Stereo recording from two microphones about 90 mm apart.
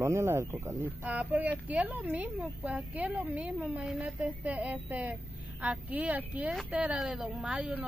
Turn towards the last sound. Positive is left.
turn(degrees=-10)  # may be behind; listen again after turning